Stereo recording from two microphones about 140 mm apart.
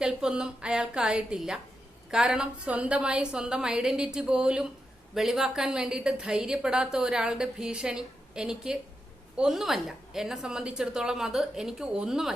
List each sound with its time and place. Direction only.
0.0 s a woman's voice: 5° right (ahead or behind)